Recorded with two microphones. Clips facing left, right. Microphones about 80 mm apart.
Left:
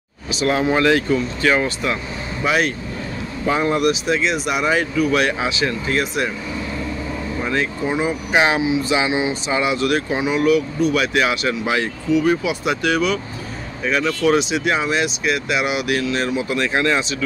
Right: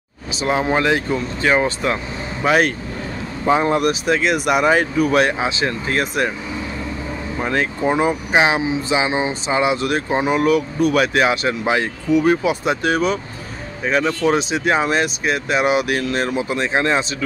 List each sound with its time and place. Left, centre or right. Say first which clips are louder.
0.4 s speech: left 1 dB; right
2.4 s speech: right 3 dB; right
3.4 s speech: right 2 dB; right
7.4 s speech: right 3 dB; right
8.3 s speech: left 2 dB; right
8.6 s speech: left 1 dB; right
11.6 s speech: right 3 dB; right
12.1 s speech: right 2 dB; right